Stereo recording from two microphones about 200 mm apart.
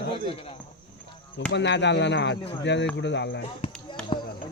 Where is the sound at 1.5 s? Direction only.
60° left (ahead or behind).